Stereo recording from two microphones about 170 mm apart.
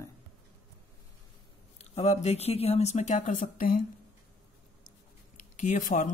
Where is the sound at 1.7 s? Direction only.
40° left (ahead or behind).